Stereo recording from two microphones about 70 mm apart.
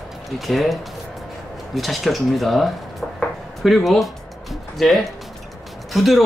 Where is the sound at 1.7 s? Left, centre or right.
Centre.